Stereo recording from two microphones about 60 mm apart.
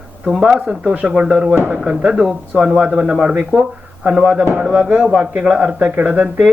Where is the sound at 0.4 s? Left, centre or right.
Centre; by 5.4 s right.